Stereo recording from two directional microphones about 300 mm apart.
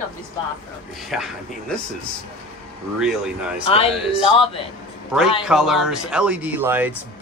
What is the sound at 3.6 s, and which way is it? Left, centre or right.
Speech, centre.